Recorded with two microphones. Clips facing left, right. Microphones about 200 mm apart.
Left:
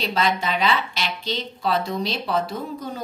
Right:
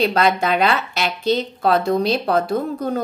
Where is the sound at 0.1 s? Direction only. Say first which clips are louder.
Right 5 dB; 55° right (ahead or behind).